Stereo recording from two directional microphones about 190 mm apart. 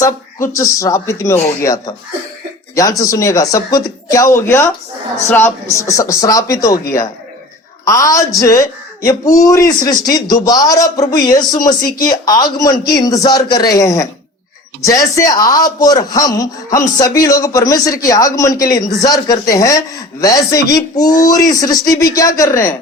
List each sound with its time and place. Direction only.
0.0 s a man's voice: 15° left (ahead or behind)